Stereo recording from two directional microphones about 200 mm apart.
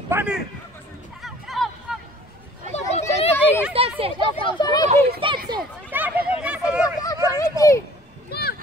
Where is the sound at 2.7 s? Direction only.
30° left (ahead or behind).